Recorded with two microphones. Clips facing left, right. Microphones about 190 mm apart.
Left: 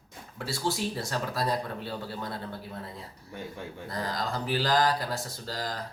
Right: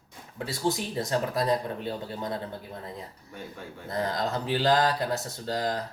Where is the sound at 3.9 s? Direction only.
25° right (ahead or behind).